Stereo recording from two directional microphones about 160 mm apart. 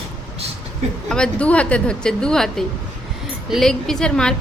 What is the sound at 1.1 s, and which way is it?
A woman's voice, 5° left (ahead or behind).